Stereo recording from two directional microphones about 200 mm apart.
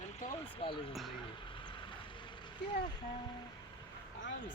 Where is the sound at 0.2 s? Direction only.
40° left (ahead or behind).